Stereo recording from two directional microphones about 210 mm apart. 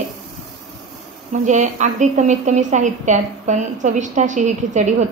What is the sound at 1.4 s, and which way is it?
A woman's voice, 35° right (ahead or behind).